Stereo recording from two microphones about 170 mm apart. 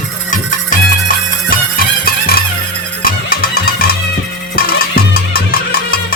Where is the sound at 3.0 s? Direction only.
55° left (ahead or behind).